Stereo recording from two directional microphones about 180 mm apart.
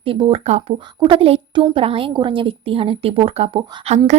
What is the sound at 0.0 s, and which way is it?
A woman's voice, 30° right (ahead or behind).